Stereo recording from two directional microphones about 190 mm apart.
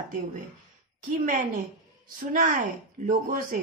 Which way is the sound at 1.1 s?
40° right (ahead or behind).